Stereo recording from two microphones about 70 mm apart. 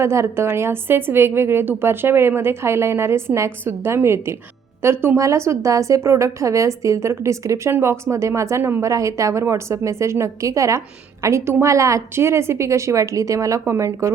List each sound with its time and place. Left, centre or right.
0.0 s a woman's voice: right
5.1 s a woman's voice: right